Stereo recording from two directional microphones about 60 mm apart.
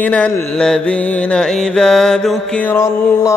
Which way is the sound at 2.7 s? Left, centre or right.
Left.